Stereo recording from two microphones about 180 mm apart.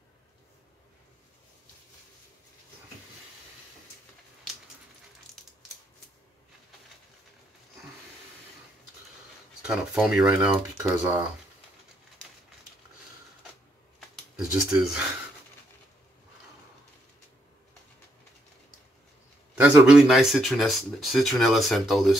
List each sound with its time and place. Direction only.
9.7 s speech: 5° right (ahead or behind)
10.5 s speech: 20° right (ahead or behind)
13.9 s a sound: centre (ahead or behind)
19.5 s speech: 5° right (ahead or behind)